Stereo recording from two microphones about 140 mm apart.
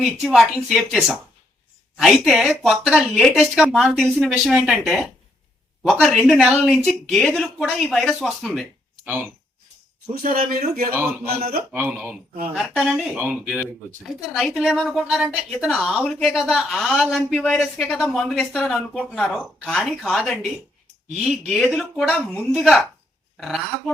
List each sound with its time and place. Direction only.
0.0 s speech: centre (ahead or behind)
10.2 s speech: 85° right
11.7 s speech: 10° right (ahead or behind)
21.5 s speech: centre (ahead or behind)